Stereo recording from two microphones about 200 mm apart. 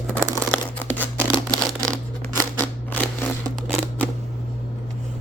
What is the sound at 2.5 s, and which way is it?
Scissors, 10° left (ahead or behind).